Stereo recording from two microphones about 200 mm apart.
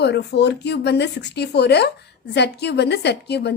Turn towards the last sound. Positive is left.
turn(degrees=55)  # may be behind; listen again after turning